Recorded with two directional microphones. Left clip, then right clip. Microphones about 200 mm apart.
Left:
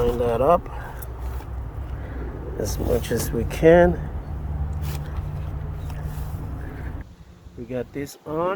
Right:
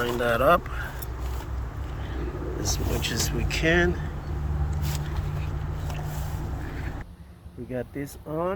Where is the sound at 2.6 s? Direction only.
35° left (ahead or behind).